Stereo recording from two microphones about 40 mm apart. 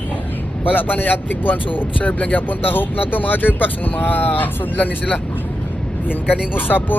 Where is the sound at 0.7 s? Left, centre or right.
Left.